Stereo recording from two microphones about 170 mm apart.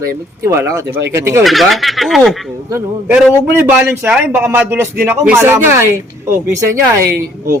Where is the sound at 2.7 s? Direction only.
10° right (ahead or behind).